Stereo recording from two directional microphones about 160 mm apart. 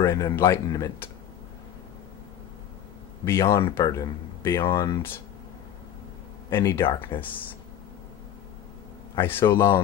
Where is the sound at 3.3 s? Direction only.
20° left (ahead or behind).